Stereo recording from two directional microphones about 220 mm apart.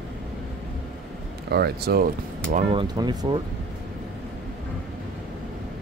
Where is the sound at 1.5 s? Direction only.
45° right (ahead or behind).